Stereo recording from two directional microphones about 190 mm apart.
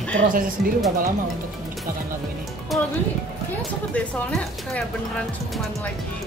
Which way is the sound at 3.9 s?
5° left (ahead or behind).